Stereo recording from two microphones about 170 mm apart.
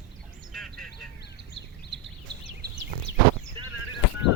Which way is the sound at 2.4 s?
90° right.